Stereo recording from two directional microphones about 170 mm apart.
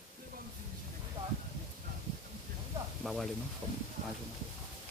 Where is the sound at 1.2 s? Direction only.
30° right (ahead or behind).